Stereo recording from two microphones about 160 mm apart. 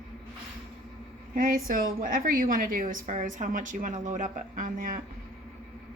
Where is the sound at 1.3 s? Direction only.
60° right (ahead or behind).